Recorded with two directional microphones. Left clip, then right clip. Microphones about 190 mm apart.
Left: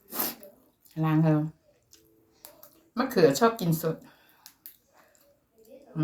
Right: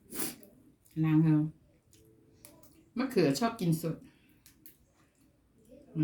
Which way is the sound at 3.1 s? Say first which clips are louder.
Left 8 dB; 15° right (ahead or behind).